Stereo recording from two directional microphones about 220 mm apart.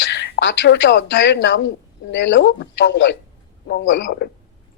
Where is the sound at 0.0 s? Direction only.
50° left (ahead or behind).